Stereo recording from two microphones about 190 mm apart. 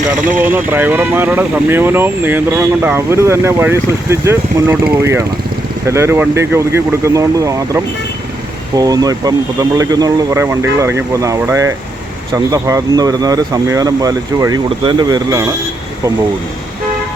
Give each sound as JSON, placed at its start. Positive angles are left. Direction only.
{"t": 0.3, "sound": "speech", "side_deg": -10}